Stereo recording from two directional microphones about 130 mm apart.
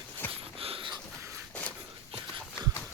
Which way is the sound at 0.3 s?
45° right (ahead or behind).